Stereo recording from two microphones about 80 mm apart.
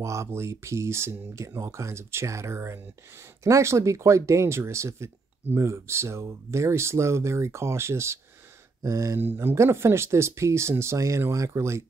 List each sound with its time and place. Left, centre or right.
0.0 s speech: right
9.2 s speech: right